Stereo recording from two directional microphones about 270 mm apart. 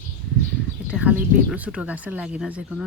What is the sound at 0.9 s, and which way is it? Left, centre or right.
Speech, centre.